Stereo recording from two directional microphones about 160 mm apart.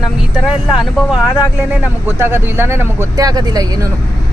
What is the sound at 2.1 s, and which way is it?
Speech, 15° right (ahead or behind).